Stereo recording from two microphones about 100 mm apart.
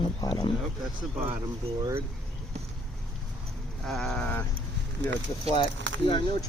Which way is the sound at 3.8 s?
5° left (ahead or behind).